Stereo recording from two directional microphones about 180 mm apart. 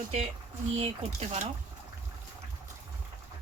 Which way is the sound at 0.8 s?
35° right (ahead or behind).